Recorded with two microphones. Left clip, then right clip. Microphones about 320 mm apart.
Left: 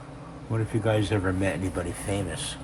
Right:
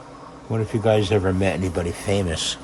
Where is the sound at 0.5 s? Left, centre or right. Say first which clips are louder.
Right 7 dB; right.